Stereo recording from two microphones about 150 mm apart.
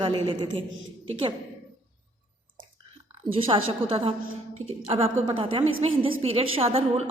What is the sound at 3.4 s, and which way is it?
A woman's voice, 35° right (ahead or behind).